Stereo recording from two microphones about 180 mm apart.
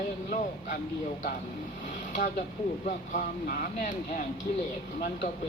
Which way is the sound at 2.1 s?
45° left (ahead or behind).